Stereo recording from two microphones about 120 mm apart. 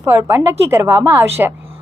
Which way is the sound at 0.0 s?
25° right (ahead or behind).